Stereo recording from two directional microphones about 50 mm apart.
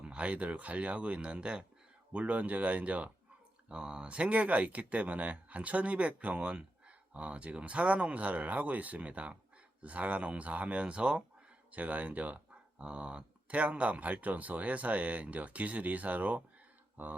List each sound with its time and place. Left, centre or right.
0.0 s speech: right